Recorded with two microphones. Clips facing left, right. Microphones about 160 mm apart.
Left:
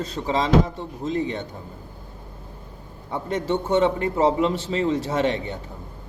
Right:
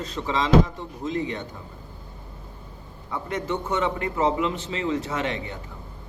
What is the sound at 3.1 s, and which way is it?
A man's voice, 30° left (ahead or behind).